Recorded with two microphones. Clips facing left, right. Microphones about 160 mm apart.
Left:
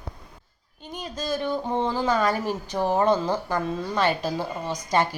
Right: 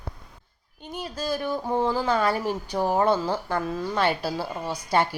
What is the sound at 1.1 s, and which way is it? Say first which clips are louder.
Speech: left 1 dB; 10° right (ahead or behind).